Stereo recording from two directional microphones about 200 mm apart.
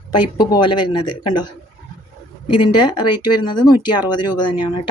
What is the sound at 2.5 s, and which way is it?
Speech, 25° left (ahead or behind).